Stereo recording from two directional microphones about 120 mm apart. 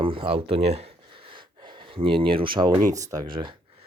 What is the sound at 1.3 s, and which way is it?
Speech, 40° right (ahead or behind).